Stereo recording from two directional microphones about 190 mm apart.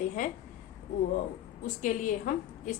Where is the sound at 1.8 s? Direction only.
45° left (ahead or behind).